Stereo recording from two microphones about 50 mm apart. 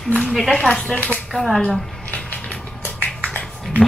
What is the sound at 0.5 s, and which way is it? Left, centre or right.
Speech, left.